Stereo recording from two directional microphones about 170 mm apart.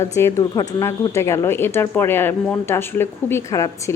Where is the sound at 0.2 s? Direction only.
15° left (ahead or behind).